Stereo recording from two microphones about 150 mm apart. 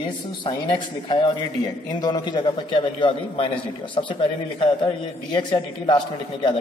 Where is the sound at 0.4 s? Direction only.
30° left (ahead or behind).